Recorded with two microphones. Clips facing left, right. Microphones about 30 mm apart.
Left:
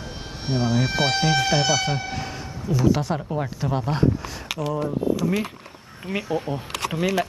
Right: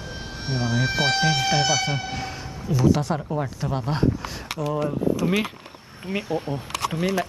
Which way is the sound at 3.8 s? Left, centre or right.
Centre.